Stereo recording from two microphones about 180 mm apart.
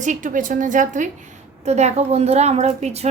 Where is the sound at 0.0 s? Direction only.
45° right (ahead or behind).